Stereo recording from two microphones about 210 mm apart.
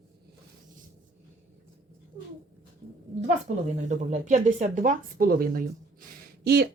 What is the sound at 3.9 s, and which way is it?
Speech, 35° right (ahead or behind).